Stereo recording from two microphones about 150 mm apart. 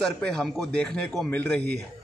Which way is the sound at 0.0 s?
5° left (ahead or behind).